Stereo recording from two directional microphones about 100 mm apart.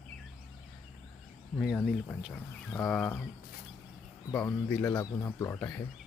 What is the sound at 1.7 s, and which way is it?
Speech, 10° left (ahead or behind).